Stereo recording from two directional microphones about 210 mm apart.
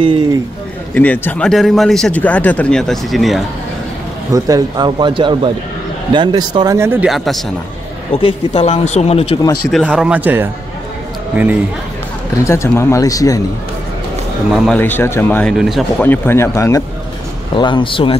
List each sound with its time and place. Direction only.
0.0 s speech: 25° right (ahead or behind)
0.9 s speech: 5° left (ahead or behind)
4.3 s speech: 20° right (ahead or behind); by 7.3 s centre (ahead or behind)
8.5 s speech: 30° left (ahead or behind)
9.7 s speech: centre (ahead or behind)
12.4 s speech: 15° left (ahead or behind)
14.5 s speech: centre (ahead or behind)
14.8 s speech: 10° left (ahead or behind)
16.0 s speech: 10° left (ahead or behind)